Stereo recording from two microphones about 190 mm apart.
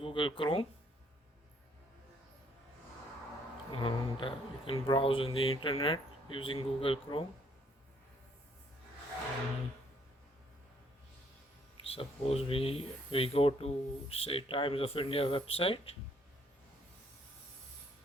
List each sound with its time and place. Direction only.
0.0 s speech: 25° left (ahead or behind)
3.7 s speech: 30° left (ahead or behind)
11.9 s speech: 30° left (ahead or behind)